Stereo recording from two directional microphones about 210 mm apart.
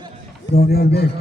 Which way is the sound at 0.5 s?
45° left (ahead or behind).